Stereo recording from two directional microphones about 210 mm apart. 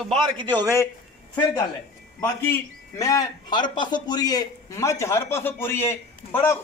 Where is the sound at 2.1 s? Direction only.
15° left (ahead or behind).